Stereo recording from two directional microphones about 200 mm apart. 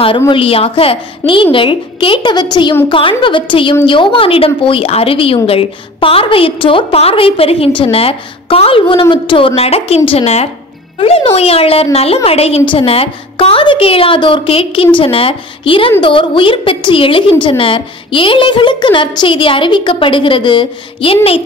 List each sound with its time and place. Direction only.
0.3 s a woman's voice: 30° left (ahead or behind)